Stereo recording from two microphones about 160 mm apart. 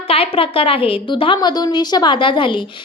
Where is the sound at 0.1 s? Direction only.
35° left (ahead or behind).